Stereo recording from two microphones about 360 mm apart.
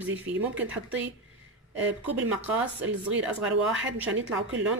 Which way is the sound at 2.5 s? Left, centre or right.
Centre.